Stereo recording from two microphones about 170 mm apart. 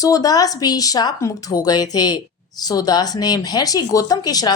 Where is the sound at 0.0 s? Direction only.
20° left (ahead or behind).